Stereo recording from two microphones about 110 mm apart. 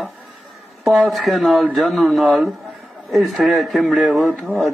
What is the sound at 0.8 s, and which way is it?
Speech, centre (ahead or behind).